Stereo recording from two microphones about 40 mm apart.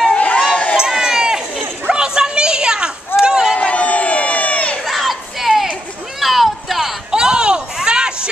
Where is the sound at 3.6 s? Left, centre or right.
Left.